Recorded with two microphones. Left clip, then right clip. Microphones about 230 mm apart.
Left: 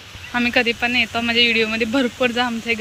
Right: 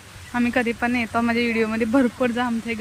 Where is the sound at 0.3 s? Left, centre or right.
Centre.